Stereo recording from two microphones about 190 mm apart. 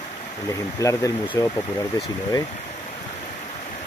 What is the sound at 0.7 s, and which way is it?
Speech, 15° left (ahead or behind).